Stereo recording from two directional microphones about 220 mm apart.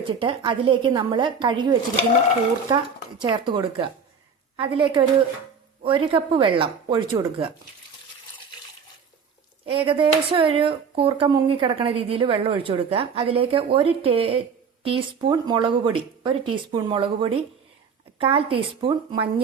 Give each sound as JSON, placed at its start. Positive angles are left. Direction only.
{"t": 0.2, "sound": "a woman's voice", "side_deg": -25}
{"t": 9.6, "sound": "a woman's voice", "side_deg": -25}